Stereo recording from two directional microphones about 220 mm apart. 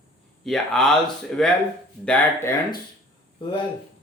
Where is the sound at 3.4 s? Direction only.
25° left (ahead or behind).